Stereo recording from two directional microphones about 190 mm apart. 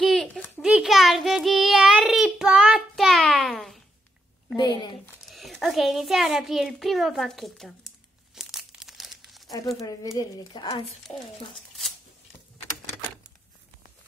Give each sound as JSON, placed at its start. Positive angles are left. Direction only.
{"t": 0.0, "sound": "a sound", "side_deg": 5}
{"t": 0.7, "sound": "child singing", "side_deg": -5}
{"t": 4.6, "sound": "a woman's voice", "side_deg": 25}
{"t": 5.3, "sound": "a child's voice", "side_deg": 0}
{"t": 8.4, "sound": "crumpling", "side_deg": 0}
{"t": 10.1, "sound": "speech", "side_deg": 20}
{"t": 11.1, "sound": "speech", "side_deg": 5}